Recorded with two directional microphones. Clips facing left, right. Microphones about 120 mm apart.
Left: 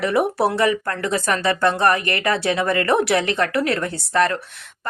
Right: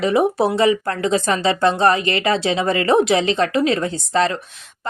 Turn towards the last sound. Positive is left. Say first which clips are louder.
# right 1 dB
turn(degrees=-20)  # may be behind; listen again after turning